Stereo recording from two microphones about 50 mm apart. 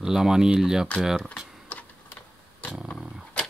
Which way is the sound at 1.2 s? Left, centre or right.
Left.